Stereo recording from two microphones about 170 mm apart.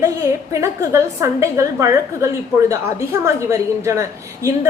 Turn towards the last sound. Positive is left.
turn(degrees=-15)  # may be behind; listen again after turning